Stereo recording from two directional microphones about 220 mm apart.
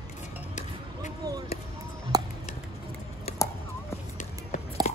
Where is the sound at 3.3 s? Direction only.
25° left (ahead or behind).